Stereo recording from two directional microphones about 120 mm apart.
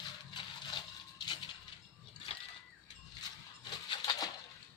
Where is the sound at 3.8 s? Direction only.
40° left (ahead or behind).